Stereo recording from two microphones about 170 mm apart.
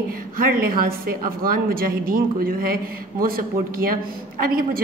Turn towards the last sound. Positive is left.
turn(degrees=-60)  # may be behind; listen again after turning